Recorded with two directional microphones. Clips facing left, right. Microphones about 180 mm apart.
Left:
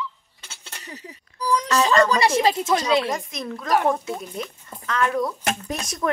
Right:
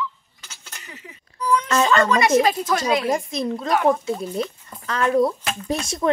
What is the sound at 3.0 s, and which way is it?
Speech, 30° right (ahead or behind).